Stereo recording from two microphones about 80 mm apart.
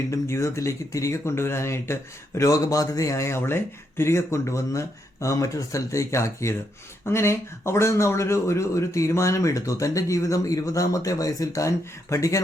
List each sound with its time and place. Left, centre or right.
0.1 s speech: left